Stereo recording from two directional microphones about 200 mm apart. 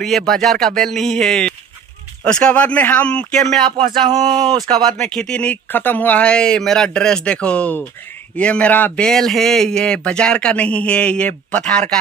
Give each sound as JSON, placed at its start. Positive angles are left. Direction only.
{"t": 0.3, "sound": "speech", "side_deg": 0}
{"t": 4.0, "sound": "speech", "side_deg": -20}
{"t": 4.6, "sound": "speech", "side_deg": 0}